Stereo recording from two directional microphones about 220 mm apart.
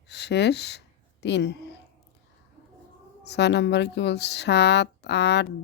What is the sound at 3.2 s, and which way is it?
A woman's voice, 50° left (ahead or behind).